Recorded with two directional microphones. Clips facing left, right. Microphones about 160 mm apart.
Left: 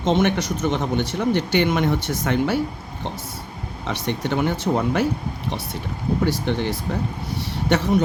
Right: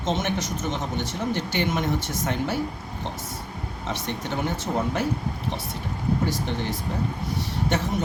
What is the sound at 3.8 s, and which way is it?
Speech, 70° left (ahead or behind).